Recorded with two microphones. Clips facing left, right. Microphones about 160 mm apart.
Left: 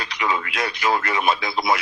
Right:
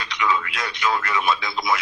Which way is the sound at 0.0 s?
35° left (ahead or behind).